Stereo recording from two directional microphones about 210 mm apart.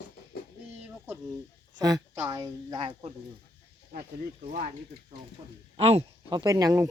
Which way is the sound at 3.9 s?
40° right (ahead or behind).